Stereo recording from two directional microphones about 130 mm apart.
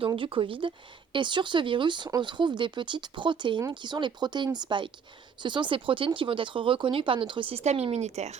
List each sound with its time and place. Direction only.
0.2 s speech: 40° right (ahead or behind)
7.6 s speech: 55° right (ahead or behind)